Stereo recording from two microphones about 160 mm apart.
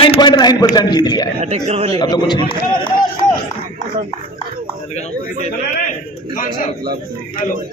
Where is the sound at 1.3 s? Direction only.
40° right (ahead or behind).